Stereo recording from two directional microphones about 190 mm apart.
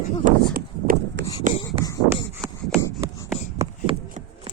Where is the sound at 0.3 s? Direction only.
50° right (ahead or behind).